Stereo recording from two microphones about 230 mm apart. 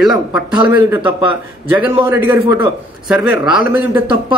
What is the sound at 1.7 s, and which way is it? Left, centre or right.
A man's voice, centre.